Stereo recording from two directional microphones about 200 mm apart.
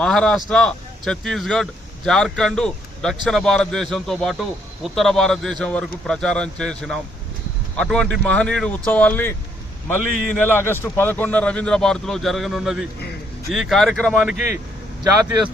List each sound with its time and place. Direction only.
0.0 s a man's voice: 5° left (ahead or behind)
15.2 s speech: 20° right (ahead or behind)